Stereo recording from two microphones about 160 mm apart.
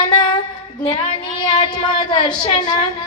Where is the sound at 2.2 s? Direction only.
25° left (ahead or behind).